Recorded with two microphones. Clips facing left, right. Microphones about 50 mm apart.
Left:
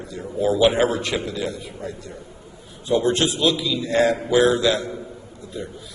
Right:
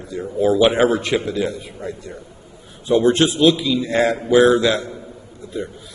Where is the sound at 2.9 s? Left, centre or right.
Right.